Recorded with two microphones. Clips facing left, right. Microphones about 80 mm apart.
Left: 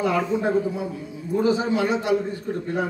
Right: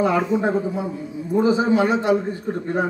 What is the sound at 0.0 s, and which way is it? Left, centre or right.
A man's voice, right.